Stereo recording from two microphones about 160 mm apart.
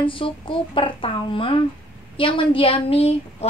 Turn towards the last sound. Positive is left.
turn(degrees=40)  # may be behind; listen again after turning